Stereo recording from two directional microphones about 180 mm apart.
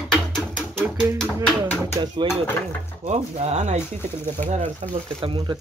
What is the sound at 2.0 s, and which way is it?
Speech, 20° right (ahead or behind).